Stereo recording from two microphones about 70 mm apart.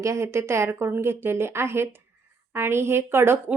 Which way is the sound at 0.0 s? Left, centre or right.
Right.